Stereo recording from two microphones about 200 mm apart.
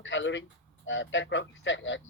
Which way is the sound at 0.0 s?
70° left (ahead or behind).